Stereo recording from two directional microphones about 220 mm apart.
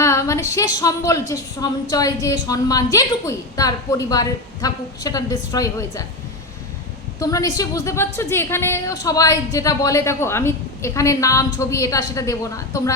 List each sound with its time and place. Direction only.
0.0 s a woman's voice: 15° left (ahead or behind)
7.2 s a woman's voice: 15° left (ahead or behind)